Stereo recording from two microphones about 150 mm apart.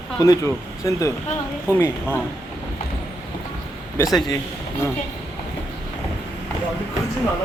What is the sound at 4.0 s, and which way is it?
Speech, 15° left (ahead or behind).